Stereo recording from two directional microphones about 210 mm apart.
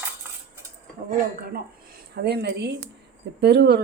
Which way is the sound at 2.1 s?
50° right (ahead or behind).